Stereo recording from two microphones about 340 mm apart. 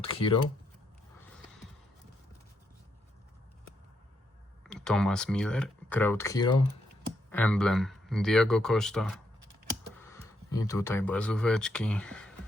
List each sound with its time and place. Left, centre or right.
0.0 s speech: centre
4.6 s speech: centre